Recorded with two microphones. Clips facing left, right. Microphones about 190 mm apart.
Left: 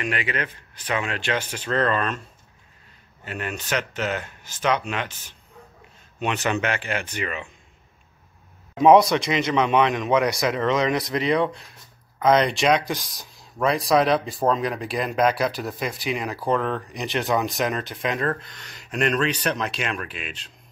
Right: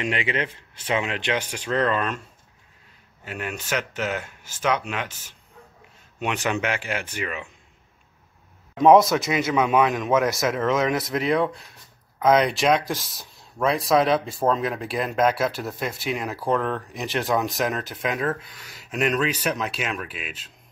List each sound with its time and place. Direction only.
0.0 s speech: 25° right (ahead or behind)
3.3 s speech: 5° right (ahead or behind)
8.7 s speech: centre (ahead or behind)